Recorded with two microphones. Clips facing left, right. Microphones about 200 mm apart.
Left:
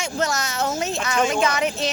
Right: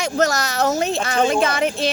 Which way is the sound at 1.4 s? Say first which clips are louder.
Right 2 dB; 50° right (ahead or behind).